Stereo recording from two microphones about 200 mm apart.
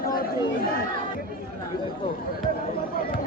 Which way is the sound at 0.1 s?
45° left (ahead or behind).